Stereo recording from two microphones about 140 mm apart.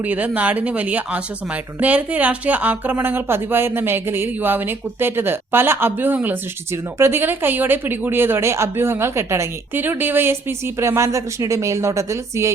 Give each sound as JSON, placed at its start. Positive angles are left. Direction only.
{"t": 0.0, "sound": "a woman's voice", "side_deg": -10}